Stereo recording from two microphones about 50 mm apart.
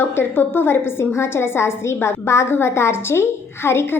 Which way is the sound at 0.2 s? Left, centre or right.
Left.